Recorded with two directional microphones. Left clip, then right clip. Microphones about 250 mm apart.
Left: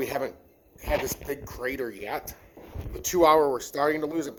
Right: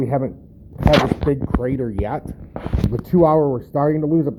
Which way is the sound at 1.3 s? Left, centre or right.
Centre.